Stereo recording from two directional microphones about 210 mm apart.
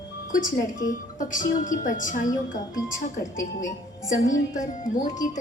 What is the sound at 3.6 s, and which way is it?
A woman's voice, 40° left (ahead or behind).